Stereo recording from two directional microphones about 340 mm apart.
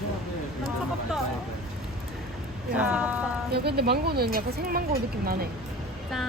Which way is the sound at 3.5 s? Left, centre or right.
Right.